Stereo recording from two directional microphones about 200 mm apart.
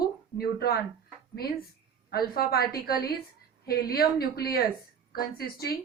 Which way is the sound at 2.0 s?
50° left (ahead or behind).